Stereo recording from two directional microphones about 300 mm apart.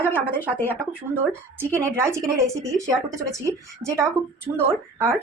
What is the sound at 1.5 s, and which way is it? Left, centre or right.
Speech, centre.